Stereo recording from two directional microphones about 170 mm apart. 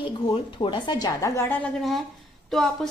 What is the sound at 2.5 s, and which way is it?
Speech, centre (ahead or behind).